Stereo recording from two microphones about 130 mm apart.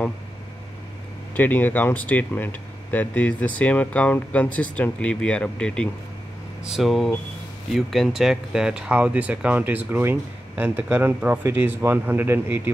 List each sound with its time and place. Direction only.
1.3 s speech: 15° left (ahead or behind); by 12.7 s 15° right (ahead or behind)